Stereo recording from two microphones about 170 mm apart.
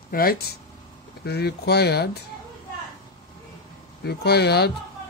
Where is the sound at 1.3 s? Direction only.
70° left (ahead or behind).